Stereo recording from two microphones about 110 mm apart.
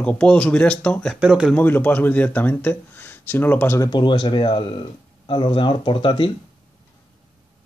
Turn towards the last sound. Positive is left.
turn(degrees=50)  # may be behind; listen again after turning